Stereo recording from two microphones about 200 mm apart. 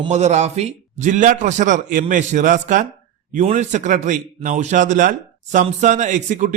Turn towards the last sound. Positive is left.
turn(degrees=-40)  # may be behind; listen again after turning